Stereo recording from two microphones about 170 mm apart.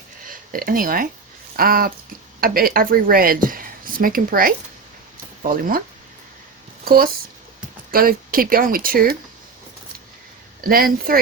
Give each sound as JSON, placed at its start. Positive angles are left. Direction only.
{"t": 0.3, "sound": "speech", "side_deg": -55}
{"t": 6.8, "sound": "speech", "side_deg": -60}
{"t": 10.6, "sound": "speech", "side_deg": -60}